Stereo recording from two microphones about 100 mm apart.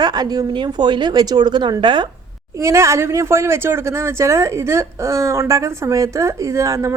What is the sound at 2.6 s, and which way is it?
Speech, 30° right (ahead or behind).